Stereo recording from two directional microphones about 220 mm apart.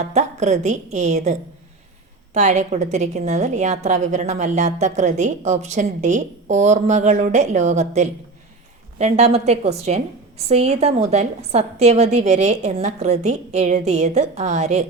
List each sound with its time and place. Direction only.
0.1 s a woman's voice: 30° right (ahead or behind)